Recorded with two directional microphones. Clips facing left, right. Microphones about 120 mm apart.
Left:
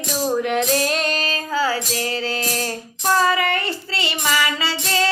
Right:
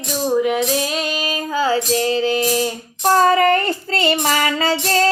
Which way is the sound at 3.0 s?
45° right (ahead or behind).